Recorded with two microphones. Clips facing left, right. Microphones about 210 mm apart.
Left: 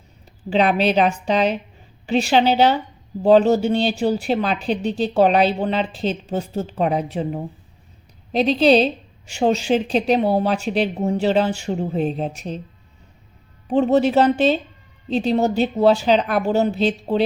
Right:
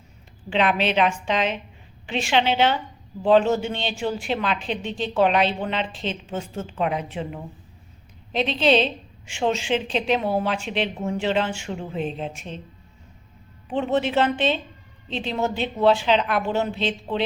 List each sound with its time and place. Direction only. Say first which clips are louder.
0.5 s a woman's voice: left 4 dB; 40° left (ahead or behind)
13.7 s a woman's voice: left 7 dB; 40° left (ahead or behind)